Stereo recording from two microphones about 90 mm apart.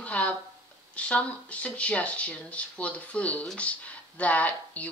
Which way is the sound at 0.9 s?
15° left (ahead or behind).